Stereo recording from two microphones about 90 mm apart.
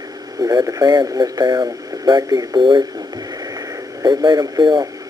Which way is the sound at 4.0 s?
50° right (ahead or behind).